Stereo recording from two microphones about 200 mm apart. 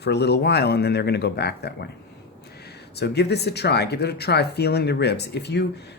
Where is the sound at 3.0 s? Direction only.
55° left (ahead or behind).